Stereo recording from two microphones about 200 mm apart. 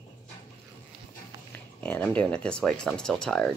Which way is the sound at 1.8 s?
10° left (ahead or behind).